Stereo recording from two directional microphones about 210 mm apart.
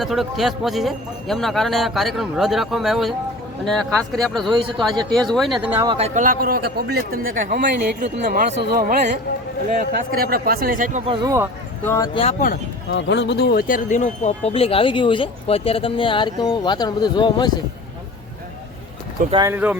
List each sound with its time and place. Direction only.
0.0 s a man's voice: centre (ahead or behind)
5.7 s speech: 15° right (ahead or behind)
6.0 s a man's voice: 40° right (ahead or behind)
7.6 s a man's voice: 55° right (ahead or behind)
10.1 s a man's voice: 45° right (ahead or behind)
11.0 s speech: 20° right (ahead or behind)
11.8 s speech: 15° left (ahead or behind)
12.2 s speech: 35° left (ahead or behind)
12.9 s speech: 55° left (ahead or behind); by 17.5 s 20° left (ahead or behind)
19.3 s speech: 20° right (ahead or behind)